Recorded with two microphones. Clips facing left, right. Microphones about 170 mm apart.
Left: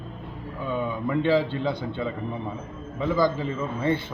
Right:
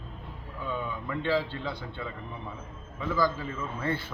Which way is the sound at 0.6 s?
15° left (ahead or behind).